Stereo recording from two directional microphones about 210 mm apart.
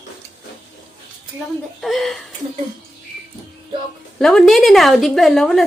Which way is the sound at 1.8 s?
Centre (ahead or behind).